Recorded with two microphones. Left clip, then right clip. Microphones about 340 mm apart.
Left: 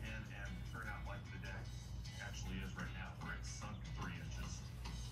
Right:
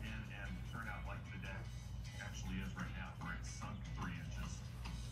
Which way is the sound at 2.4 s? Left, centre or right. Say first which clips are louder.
Right 1 dB; left.